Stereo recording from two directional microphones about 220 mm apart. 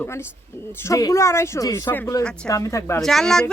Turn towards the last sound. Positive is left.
turn(degrees=5)  # may be behind; listen again after turning